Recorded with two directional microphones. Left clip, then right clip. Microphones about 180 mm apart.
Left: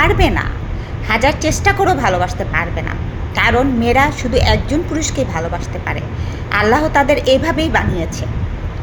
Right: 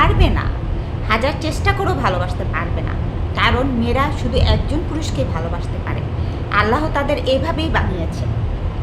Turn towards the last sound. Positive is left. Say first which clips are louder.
# left 5 dB
turn(degrees=25)  # may be behind; listen again after turning